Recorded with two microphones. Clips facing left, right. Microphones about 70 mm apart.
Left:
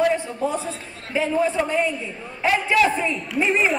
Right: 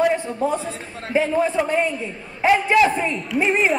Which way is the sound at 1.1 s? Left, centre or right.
Right.